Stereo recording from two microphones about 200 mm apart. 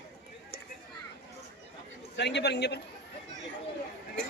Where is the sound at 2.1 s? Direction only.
60° left (ahead or behind).